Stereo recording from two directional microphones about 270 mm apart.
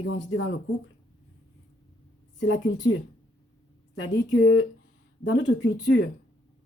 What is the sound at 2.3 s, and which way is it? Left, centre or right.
Speech, left.